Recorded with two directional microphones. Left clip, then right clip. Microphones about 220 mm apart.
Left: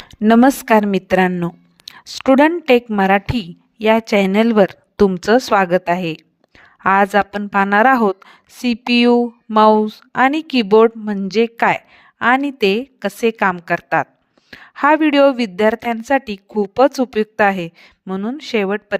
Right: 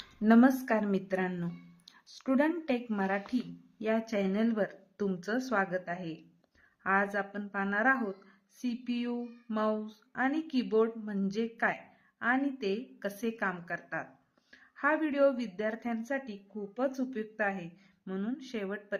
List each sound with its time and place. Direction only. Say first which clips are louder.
0.2 s a woman's voice: left 13 dB; 40° left (ahead or behind)